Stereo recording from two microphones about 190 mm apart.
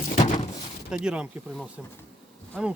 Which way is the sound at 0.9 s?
5° right (ahead or behind).